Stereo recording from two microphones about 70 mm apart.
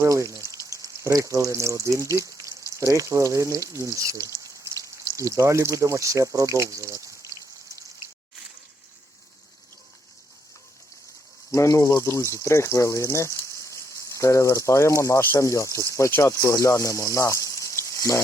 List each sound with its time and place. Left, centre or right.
0.0 s speech: right
11.5 s speech: left
15.2 s speech: left
15.4 s speech: left